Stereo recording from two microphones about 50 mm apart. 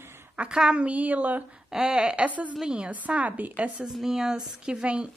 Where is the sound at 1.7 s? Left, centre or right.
Centre.